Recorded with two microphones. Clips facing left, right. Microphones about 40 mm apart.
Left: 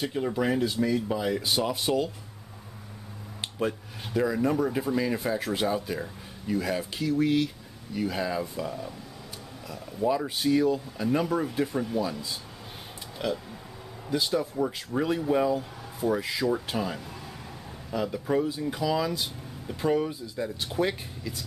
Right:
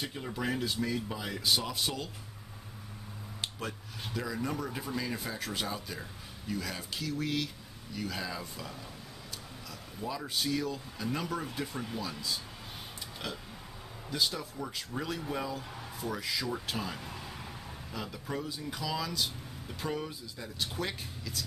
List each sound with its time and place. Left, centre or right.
0.0 s speech: centre
3.3 s speech: centre
13.2 s speech: centre